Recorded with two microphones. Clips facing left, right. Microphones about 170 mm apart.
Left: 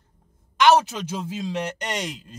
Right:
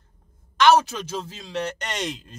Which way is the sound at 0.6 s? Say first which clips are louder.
Even; 15° left (ahead or behind).